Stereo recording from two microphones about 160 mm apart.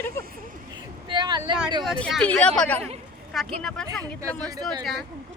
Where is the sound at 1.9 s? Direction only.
5° left (ahead or behind).